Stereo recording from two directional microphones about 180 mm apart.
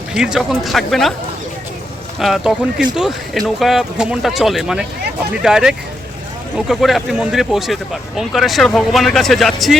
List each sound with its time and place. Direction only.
0.1 s speech: 5° right (ahead or behind)
2.1 s speech: centre (ahead or behind)